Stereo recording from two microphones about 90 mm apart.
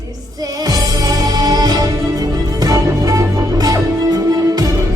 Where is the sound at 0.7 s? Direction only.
45° right (ahead or behind).